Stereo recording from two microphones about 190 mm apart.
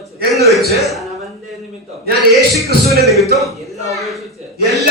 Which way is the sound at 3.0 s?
Centre (ahead or behind).